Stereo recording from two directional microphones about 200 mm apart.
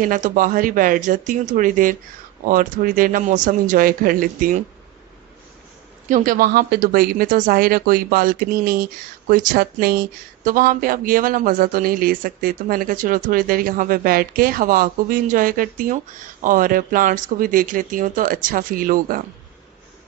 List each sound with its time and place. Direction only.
0.0 s speech: 40° right (ahead or behind)
6.0 s speech: 45° right (ahead or behind)